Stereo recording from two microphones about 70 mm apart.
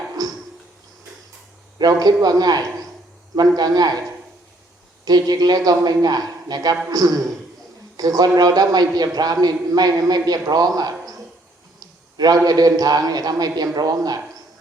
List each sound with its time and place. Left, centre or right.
0.2 s a sound: right
1.8 s a man's voice: right
5.0 s a man's voice: right
12.1 s a man's voice: right